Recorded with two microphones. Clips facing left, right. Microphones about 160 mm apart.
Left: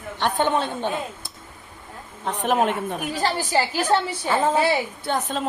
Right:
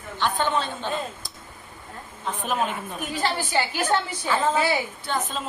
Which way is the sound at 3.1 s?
35° left (ahead or behind).